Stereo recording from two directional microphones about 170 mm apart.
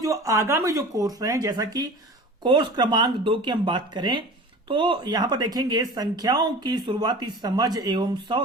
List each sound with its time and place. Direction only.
0.0 s speech: 20° right (ahead or behind)